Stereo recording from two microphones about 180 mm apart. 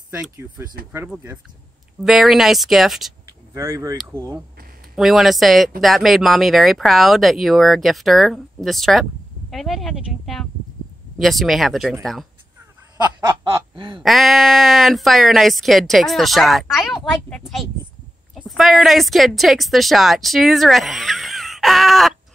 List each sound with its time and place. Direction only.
0.1 s speech: 10° right (ahead or behind)
3.3 s vehicle: 15° right (ahead or behind)
4.1 s speech: 15° right (ahead or behind)
4.9 s speech: centre (ahead or behind)
12.9 s a sound: 15° right (ahead or behind)
13.7 s speech: 25° right (ahead or behind)
14.0 s a woman's voice: centre (ahead or behind)